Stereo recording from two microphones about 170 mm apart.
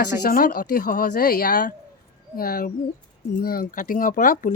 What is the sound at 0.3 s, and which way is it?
A woman's voice, 55° left (ahead or behind).